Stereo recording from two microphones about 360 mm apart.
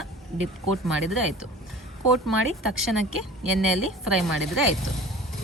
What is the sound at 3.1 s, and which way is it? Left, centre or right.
Speech, right.